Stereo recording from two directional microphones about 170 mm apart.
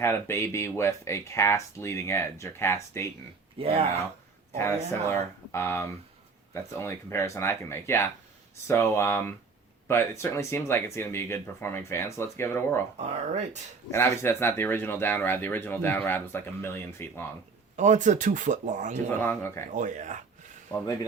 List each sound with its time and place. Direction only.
0.0 s speech: 15° left (ahead or behind)
3.6 s speech: 35° right (ahead or behind)
5.5 s speech: 15° left (ahead or behind)
13.0 s speech: 45° right (ahead or behind)
13.9 s speech: 15° left (ahead or behind)
17.7 s speech: 45° right (ahead or behind)
19.1 s speech: 10° left (ahead or behind)
19.7 s speech: 45° right (ahead or behind)
20.7 s speech: 20° left (ahead or behind)